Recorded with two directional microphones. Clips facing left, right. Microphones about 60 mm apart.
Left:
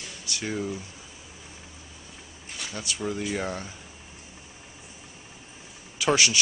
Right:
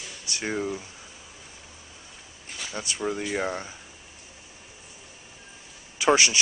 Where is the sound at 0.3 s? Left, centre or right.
Right.